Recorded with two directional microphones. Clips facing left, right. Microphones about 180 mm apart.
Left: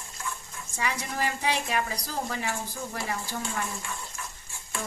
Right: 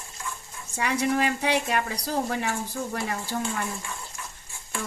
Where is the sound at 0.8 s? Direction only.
60° right (ahead or behind).